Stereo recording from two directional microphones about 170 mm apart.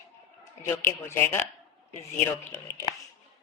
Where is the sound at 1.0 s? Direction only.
15° left (ahead or behind).